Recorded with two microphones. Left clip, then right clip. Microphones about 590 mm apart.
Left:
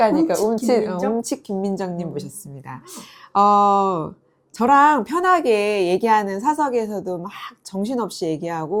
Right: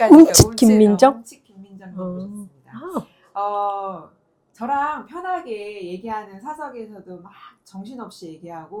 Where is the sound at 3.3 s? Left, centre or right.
Left.